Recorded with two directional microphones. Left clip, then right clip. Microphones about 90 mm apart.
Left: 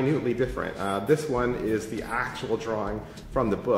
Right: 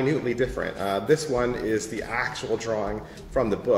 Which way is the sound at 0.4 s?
30° left (ahead or behind).